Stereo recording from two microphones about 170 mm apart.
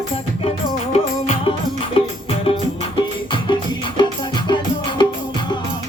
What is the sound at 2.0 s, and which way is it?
Music, 30° left (ahead or behind).